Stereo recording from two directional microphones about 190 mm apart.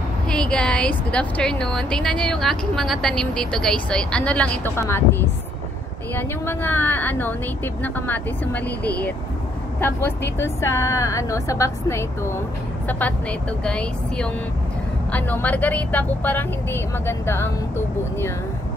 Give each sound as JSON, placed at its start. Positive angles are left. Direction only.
{"t": 0.3, "sound": "a woman's voice", "side_deg": 5}